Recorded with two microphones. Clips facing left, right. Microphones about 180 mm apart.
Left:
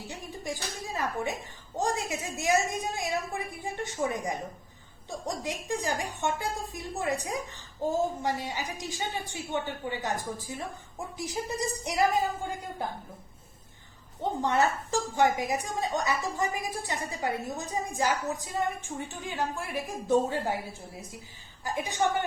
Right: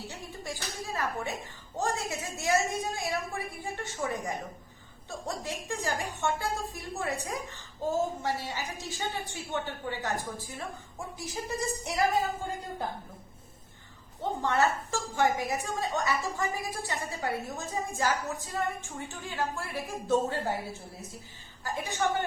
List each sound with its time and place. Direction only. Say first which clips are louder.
0.1 s a sound: left 3 dB; 15° left (ahead or behind)
0.9 s a woman's voice: left 2 dB; 20° left (ahead or behind)
14.2 s a woman's voice: left 1 dB; 15° left (ahead or behind)
21.6 s a woman's voice: left 2 dB; 15° left (ahead or behind)